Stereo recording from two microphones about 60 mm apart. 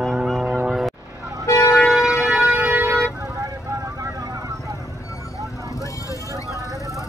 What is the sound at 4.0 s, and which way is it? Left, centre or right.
Vehicle, right.